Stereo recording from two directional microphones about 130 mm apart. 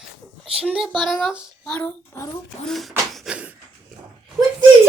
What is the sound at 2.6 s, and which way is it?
Speech, centre (ahead or behind).